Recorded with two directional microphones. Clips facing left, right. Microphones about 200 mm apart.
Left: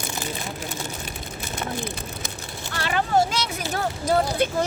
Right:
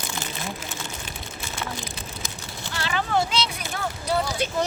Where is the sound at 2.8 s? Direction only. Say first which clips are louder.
Left 3 dB; 45° left (ahead or behind).